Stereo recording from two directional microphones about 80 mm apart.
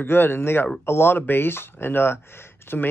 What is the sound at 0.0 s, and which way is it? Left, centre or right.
Speech, left.